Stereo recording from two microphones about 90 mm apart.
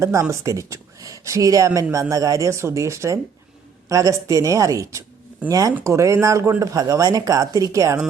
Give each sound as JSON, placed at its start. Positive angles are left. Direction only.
{"t": 0.0, "sound": "speech", "side_deg": -35}